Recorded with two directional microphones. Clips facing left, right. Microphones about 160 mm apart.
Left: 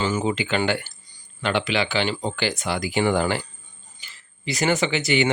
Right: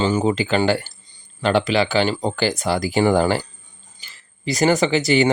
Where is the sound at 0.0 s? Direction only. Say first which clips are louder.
Right 5 dB; 35° right (ahead or behind).